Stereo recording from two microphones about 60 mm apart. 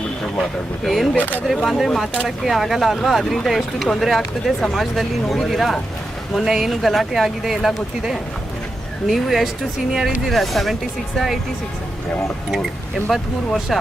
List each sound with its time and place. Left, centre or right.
0.9 s speech: centre
1.1 s speech: left
1.6 s speech: centre
13.1 s speech: centre